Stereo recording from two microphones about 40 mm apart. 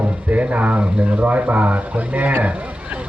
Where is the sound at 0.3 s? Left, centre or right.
Right.